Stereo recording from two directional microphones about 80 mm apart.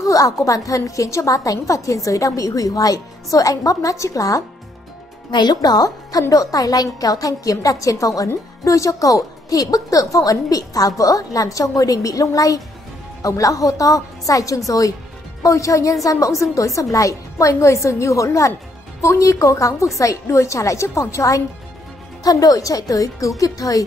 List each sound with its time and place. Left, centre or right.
0.0 s a woman's voice: left
5.3 s a woman's voice: left
22.2 s a woman's voice: left